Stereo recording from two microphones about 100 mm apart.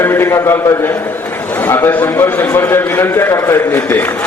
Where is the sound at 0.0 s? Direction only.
25° left (ahead or behind).